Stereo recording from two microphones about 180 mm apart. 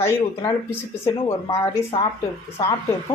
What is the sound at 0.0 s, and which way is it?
Speech, 15° left (ahead or behind).